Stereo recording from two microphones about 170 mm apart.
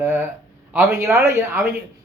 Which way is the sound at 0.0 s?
15° right (ahead or behind).